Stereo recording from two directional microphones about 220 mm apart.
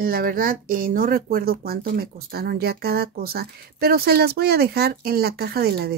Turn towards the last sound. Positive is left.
turn(degrees=-45)  # may be behind; listen again after turning